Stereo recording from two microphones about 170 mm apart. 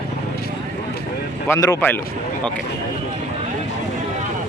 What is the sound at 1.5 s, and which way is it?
Speech, 15° left (ahead or behind).